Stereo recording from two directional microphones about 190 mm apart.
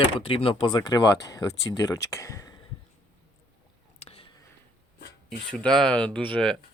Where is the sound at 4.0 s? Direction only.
30° left (ahead or behind).